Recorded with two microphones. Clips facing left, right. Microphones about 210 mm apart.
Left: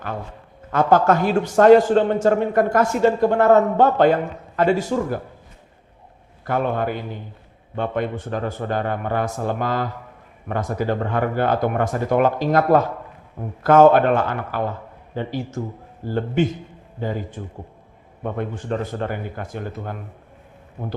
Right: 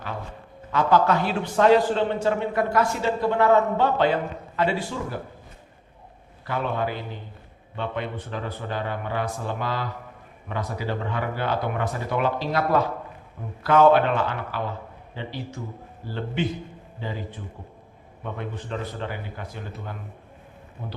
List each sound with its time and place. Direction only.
0.7 s a man's voice: 50° left (ahead or behind)
6.4 s a man's voice: 50° left (ahead or behind)